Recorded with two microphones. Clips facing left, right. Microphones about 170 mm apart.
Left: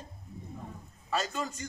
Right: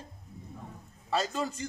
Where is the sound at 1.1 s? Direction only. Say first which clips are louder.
Right 2 dB; 35° right (ahead or behind).